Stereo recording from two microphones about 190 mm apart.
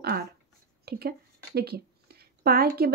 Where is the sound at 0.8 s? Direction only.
55° right (ahead or behind).